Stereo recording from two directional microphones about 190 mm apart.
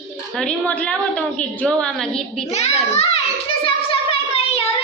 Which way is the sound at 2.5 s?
35° left (ahead or behind).